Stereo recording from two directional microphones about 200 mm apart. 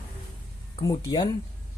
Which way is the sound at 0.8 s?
15° left (ahead or behind).